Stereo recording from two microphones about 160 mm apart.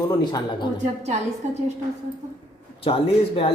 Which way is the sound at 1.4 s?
45° right (ahead or behind).